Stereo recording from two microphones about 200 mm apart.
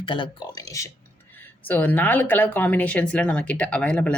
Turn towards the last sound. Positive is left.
turn(degrees=5)  # may be behind; listen again after turning